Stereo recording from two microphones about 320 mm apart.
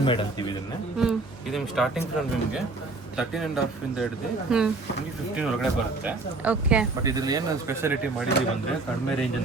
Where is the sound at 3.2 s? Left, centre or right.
Centre.